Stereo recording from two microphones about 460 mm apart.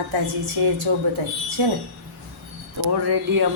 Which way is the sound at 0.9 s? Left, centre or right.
Right.